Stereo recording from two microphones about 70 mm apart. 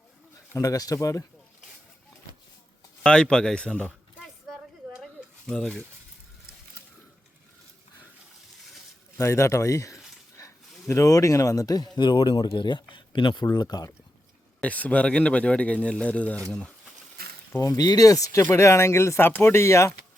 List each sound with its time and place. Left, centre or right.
0.5 s speech: left
3.0 s speech: centre
4.2 s a sound: centre
5.5 s speech: centre
9.1 s speech: left
11.9 s speech: left
13.3 s speech: left
14.6 s speech: centre
17.6 s speech: left
18.5 s speech: left